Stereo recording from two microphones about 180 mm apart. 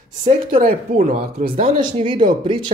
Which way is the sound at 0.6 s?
50° right (ahead or behind).